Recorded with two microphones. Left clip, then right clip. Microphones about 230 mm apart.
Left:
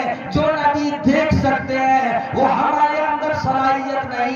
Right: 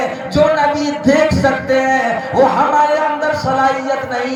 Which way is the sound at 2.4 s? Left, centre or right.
Right.